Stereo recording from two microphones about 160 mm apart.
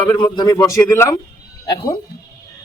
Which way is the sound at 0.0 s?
30° left (ahead or behind).